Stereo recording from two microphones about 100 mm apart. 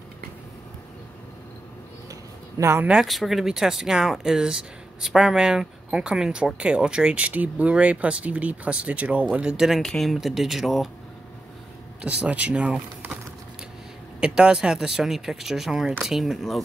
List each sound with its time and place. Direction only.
2.6 s speech: 25° right (ahead or behind)
2.9 s speech: 5° right (ahead or behind)
12.0 s speech: 10° right (ahead or behind)
14.2 s speech: 10° right (ahead or behind)